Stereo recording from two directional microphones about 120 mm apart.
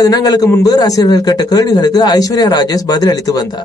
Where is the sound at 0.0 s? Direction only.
30° left (ahead or behind).